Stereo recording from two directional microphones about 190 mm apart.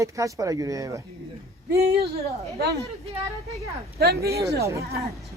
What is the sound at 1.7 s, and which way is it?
Speech, 60° right (ahead or behind).